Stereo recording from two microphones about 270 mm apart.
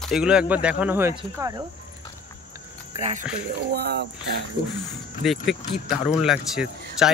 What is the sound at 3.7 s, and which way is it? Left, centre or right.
Speech, right.